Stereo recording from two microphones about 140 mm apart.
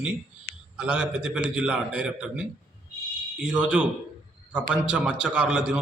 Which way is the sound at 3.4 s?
10° right (ahead or behind).